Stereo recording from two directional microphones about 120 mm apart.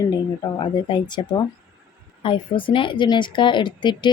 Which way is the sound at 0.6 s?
40° left (ahead or behind).